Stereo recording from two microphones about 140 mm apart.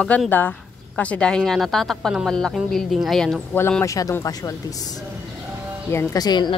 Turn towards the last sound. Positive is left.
turn(degrees=30)  # may be behind; listen again after turning